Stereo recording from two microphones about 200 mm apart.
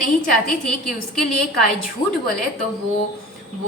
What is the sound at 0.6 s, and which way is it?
Speech, centre (ahead or behind).